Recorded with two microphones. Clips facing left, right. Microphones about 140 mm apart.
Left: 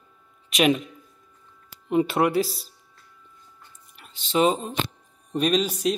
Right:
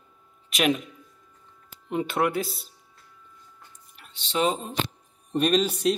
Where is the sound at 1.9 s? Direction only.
5° left (ahead or behind).